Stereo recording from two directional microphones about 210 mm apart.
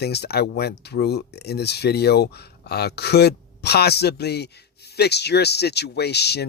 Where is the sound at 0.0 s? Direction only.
50° left (ahead or behind).